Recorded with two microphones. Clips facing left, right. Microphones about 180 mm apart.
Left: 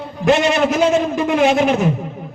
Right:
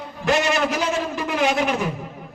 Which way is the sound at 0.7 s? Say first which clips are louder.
Left 8 dB; 25° left (ahead or behind).